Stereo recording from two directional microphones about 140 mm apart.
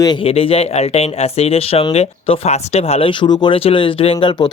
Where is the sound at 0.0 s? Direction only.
30° left (ahead or behind).